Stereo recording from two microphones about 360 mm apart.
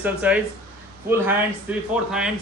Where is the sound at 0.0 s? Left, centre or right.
Centre.